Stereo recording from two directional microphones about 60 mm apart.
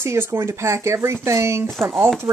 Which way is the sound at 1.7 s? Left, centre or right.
Centre.